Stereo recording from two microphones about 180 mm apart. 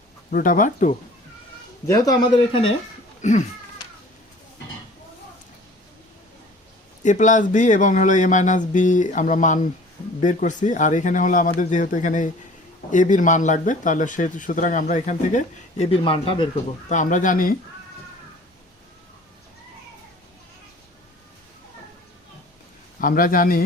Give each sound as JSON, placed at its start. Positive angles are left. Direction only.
{"t": 0.3, "sound": "speech", "side_deg": 50}
{"t": 1.9, "sound": "speech", "side_deg": 20}
{"t": 3.2, "sound": "speech", "side_deg": 40}
{"t": 7.0, "sound": "speech", "side_deg": 45}
{"t": 16.9, "sound": "speech", "side_deg": 45}
{"t": 23.0, "sound": "speech", "side_deg": 50}